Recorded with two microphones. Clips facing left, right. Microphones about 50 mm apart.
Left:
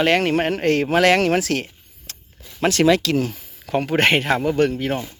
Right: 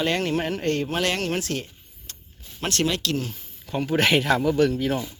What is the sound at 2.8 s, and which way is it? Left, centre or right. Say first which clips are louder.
Speech: left 10 dB; left.